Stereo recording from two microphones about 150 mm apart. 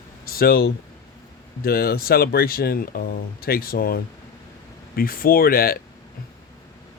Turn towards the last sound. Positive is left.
turn(degrees=80)